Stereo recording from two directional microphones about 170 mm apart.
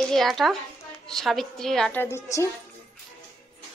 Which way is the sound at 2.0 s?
15° left (ahead or behind).